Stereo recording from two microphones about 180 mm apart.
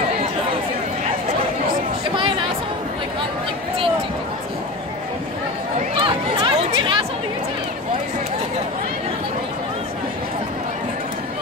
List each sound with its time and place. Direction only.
5.9 s chatter: 30° right (ahead or behind)